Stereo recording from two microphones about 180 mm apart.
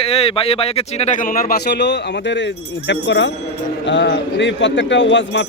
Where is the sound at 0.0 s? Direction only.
30° left (ahead or behind).